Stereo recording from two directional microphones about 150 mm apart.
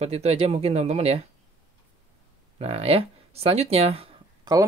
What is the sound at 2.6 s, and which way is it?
Speech, 40° right (ahead or behind).